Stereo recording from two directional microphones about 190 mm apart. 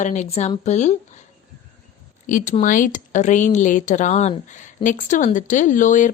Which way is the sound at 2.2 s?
45° left (ahead or behind).